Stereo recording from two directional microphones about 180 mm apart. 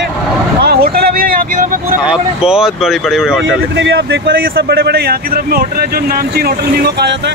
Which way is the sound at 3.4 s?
90° right.